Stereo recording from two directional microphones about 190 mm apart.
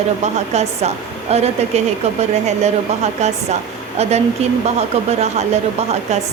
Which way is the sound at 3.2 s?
35° right (ahead or behind).